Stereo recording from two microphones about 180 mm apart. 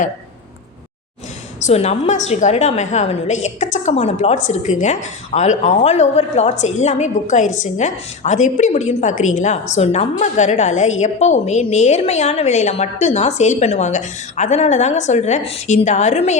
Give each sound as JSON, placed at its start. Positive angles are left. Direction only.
{"t": 1.5, "sound": "a woman's voice", "side_deg": 40}